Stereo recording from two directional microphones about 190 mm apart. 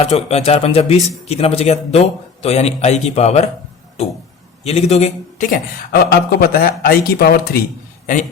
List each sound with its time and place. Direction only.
0.0 s a man's voice: 35° left (ahead or behind)
4.6 s a man's voice: 35° left (ahead or behind); by 7.5 s 55° left (ahead or behind)